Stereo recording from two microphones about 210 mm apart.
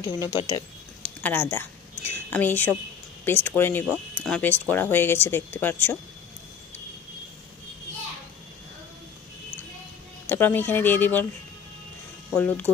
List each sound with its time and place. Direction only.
0.0 s speech: 20° left (ahead or behind)
1.0 s a woman's voice: 10° left (ahead or behind)
10.2 s speech: 10° left (ahead or behind)
12.4 s speech: 5° left (ahead or behind)